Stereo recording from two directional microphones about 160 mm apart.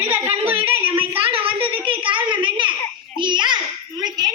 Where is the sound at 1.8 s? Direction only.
30° right (ahead or behind).